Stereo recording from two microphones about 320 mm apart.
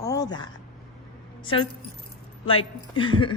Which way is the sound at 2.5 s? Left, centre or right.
Centre.